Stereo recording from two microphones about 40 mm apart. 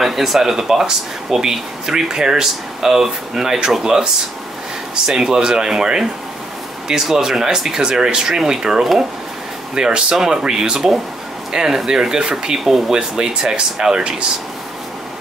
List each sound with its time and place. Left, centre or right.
0.0 s speech: centre; by 14.2 s right